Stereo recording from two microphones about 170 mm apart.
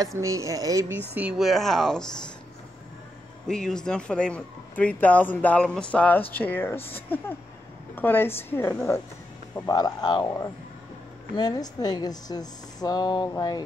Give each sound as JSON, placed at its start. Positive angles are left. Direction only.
{"t": 0.0, "sound": "speech", "side_deg": -20}
{"t": 1.1, "sound": "speech", "side_deg": -5}
{"t": 3.4, "sound": "speech", "side_deg": 5}
{"t": 7.9, "sound": "speech", "side_deg": 10}